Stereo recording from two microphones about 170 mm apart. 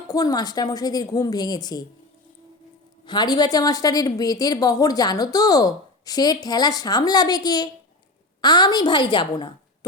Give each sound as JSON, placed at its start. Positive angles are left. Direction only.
{"t": 0.1, "sound": "a woman's voice", "side_deg": 20}
{"t": 3.1, "sound": "a woman's voice", "side_deg": 25}